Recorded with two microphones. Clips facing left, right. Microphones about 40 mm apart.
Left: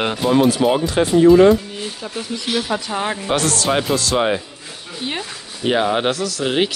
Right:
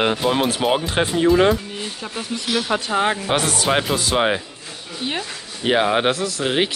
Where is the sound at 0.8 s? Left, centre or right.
Right.